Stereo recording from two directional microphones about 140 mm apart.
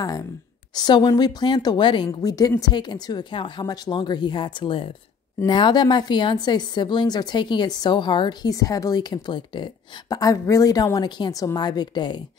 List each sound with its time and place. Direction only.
0.0 s a woman's voice: 25° left (ahead or behind)